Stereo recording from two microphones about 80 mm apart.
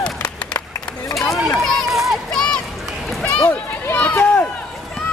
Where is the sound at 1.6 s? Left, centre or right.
Centre.